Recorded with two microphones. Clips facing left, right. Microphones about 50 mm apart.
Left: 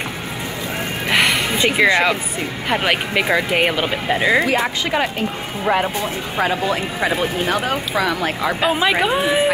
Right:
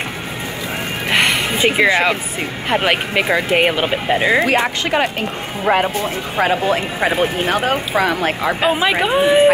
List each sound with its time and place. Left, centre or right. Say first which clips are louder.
1.1 s a sound: right 1 dB; centre
1.6 s speech: right 1 dB; centre
3.3 s speech: right 1 dB; centre
3.5 s speech: right 3 dB; centre
4.5 s speech: right 2 dB; right
6.4 s speech: right 3 dB; right
8.6 s speech: right 1 dB; centre